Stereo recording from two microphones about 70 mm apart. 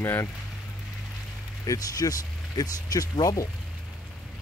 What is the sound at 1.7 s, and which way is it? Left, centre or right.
Speech, left.